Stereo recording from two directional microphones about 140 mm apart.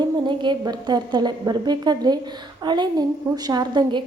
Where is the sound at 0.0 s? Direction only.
30° right (ahead or behind).